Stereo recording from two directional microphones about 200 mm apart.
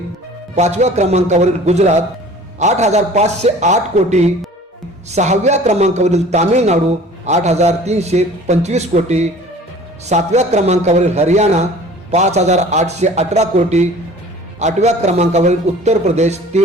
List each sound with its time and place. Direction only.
0.5 s a man's voice: 35° right (ahead or behind)